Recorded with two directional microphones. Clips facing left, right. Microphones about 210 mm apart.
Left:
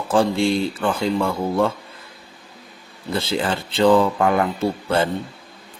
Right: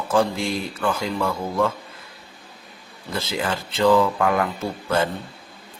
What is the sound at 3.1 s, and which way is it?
A man's voice, 30° left (ahead or behind).